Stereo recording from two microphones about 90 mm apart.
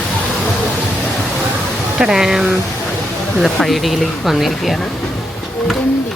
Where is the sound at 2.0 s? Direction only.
5° right (ahead or behind).